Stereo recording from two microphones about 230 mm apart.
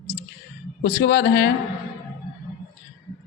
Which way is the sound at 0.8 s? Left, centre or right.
Left.